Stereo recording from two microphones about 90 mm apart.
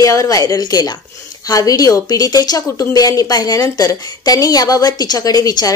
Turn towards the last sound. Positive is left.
turn(degrees=45)  # may be behind; listen again after turning